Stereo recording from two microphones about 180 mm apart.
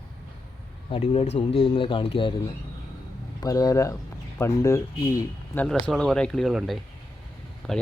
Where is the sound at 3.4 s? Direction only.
20° left (ahead or behind).